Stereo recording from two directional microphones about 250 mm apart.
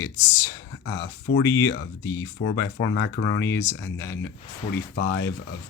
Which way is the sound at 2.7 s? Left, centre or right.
Left.